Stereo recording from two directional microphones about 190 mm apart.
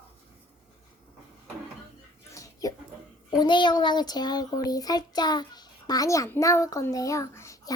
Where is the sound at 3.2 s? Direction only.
25° left (ahead or behind).